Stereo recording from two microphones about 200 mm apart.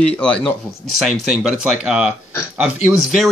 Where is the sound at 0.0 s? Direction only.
5° left (ahead or behind).